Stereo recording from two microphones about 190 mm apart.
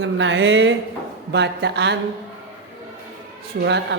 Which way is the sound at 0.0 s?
75° right (ahead or behind).